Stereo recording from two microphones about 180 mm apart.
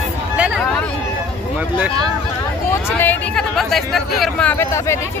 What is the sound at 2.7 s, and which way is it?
Speech, 10° left (ahead or behind).